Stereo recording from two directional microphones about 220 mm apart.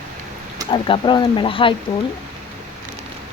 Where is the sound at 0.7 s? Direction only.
20° left (ahead or behind).